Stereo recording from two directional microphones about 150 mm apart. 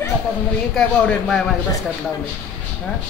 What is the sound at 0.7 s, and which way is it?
Speech, 5° left (ahead or behind).